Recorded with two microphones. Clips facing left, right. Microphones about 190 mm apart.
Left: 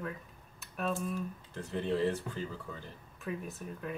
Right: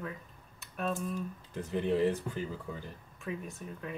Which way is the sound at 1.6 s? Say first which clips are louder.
Right 3 dB; 15° right (ahead or behind).